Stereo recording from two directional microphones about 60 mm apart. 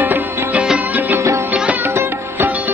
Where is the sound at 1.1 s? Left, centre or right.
Right.